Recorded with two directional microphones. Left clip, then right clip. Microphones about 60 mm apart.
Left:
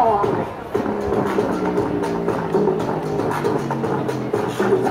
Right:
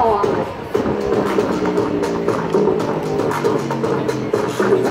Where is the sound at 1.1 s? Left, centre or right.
Right.